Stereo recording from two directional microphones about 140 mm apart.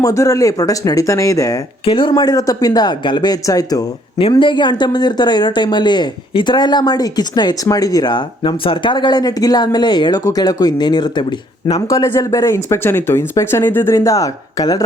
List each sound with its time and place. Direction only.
0.0 s speech: 25° left (ahead or behind)
1.8 s speech: 35° left (ahead or behind)
4.2 s speech: 35° left (ahead or behind)